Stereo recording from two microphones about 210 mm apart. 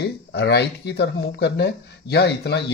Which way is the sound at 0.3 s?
55° left (ahead or behind).